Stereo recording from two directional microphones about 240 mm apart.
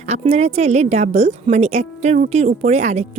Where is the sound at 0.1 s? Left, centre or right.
Right.